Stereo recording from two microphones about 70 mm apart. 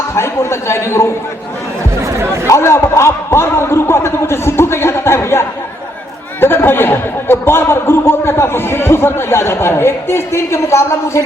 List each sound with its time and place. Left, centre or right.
0.1 s a man's voice: left
2.1 s speech: right
2.5 s speech: left